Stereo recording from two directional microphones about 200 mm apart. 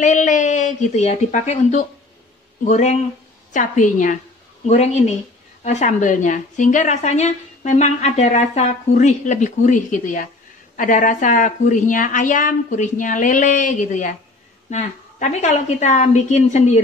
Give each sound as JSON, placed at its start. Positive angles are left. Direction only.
{"t": 0.0, "sound": "a woman's voice", "side_deg": 40}